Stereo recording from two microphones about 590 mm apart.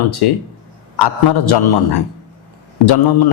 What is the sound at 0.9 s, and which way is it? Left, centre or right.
A man's voice, left.